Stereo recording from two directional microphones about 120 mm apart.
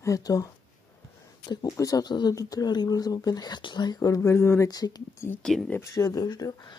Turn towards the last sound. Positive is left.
turn(degrees=30)  # may be behind; listen again after turning